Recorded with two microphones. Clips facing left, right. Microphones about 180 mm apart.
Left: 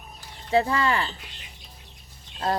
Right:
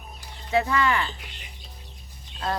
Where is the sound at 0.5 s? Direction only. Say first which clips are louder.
Left 1 dB; 30° left (ahead or behind).